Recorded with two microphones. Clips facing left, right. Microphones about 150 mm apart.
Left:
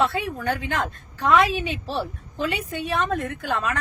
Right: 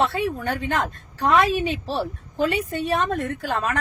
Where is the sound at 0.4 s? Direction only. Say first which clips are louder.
Right 1 dB; 45° right (ahead or behind).